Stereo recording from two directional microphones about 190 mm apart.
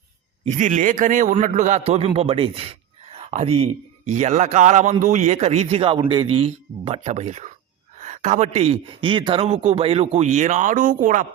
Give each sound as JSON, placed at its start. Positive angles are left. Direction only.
{"t": 0.4, "sound": "a man's voice", "side_deg": -40}